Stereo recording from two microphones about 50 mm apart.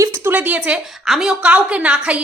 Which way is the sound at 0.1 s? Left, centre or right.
Right.